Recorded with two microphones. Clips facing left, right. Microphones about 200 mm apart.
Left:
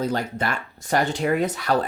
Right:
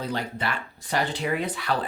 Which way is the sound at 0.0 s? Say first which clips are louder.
Left 5 dB; 45° left (ahead or behind).